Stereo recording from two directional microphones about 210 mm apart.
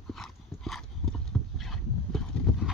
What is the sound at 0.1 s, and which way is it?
Clip-clop, centre (ahead or behind).